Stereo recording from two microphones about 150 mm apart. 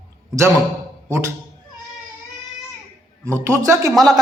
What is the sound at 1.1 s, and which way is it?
Speech, 20° right (ahead or behind).